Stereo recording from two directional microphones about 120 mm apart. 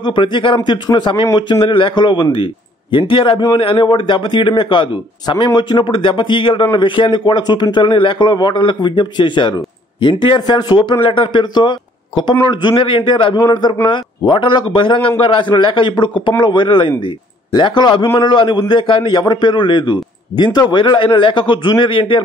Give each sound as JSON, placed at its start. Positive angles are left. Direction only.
{"t": 0.0, "sound": "a man's voice", "side_deg": 45}